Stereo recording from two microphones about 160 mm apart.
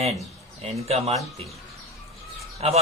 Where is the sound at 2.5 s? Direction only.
40° right (ahead or behind).